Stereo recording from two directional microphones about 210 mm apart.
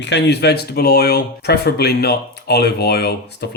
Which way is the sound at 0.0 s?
55° left (ahead or behind).